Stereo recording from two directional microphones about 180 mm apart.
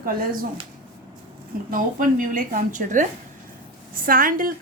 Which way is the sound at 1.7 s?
50° right (ahead or behind).